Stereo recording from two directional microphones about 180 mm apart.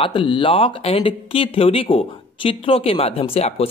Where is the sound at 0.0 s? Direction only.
30° left (ahead or behind).